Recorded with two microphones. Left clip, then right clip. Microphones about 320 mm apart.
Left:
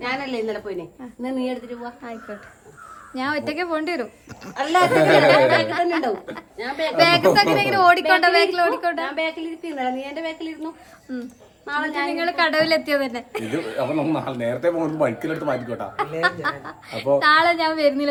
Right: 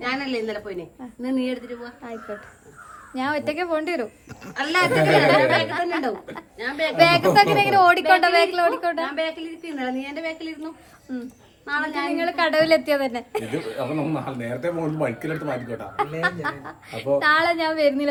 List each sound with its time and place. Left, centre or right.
0.0 s a woman's voice: centre
3.2 s a woman's voice: centre
4.5 s speech: centre
5.5 s a woman's voice: centre
9.0 s a woman's voice: centre
11.1 s a woman's voice: centre
11.6 s a woman's voice: centre
12.1 s a woman's voice: centre
13.7 s speech: centre
16.2 s a woman's voice: centre